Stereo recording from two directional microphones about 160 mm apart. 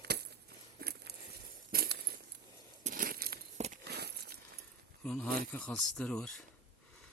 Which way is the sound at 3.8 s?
90° right.